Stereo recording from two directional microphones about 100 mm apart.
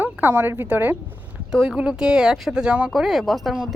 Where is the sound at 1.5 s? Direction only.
5° right (ahead or behind).